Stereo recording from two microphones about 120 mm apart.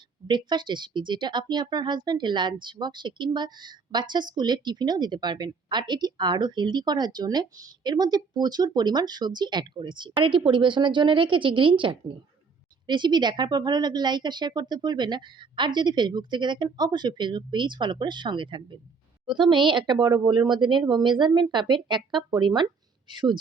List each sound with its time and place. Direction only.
0.3 s speech: 40° right (ahead or behind)